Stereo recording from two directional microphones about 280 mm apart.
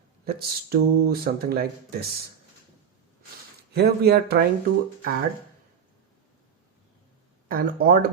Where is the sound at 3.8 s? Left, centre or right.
Right.